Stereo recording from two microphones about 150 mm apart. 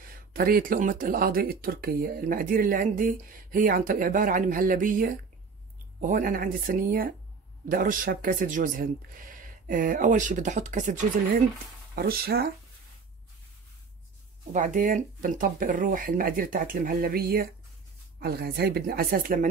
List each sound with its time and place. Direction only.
0.3 s speech: 70° right (ahead or behind)
11.9 s speech: 90° right
14.5 s speech: 60° right (ahead or behind)